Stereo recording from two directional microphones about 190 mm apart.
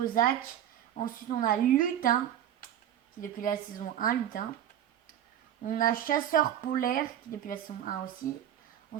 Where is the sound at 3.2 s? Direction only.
45° left (ahead or behind).